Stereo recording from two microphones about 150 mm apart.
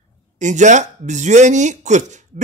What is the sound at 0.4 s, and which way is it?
Speech, 55° right (ahead or behind).